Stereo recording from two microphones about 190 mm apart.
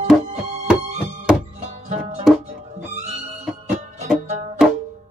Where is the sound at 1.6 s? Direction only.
35° right (ahead or behind).